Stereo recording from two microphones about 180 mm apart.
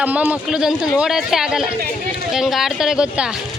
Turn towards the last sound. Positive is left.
turn(degrees=-5)  # may be behind; listen again after turning